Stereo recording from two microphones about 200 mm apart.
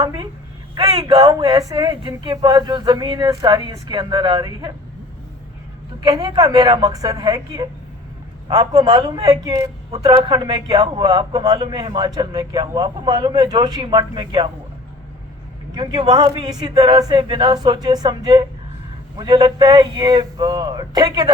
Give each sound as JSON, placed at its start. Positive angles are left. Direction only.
{"t": 0.0, "sound": "a man's voice", "side_deg": -20}
{"t": 1.1, "sound": "a man's voice", "side_deg": -20}
{"t": 6.1, "sound": "a man's voice", "side_deg": -20}
{"t": 15.7, "sound": "a man's voice", "side_deg": -20}